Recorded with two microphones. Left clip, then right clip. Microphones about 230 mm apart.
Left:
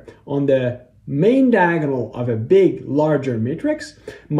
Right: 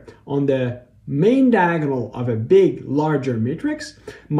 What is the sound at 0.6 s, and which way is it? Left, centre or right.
Speech, centre.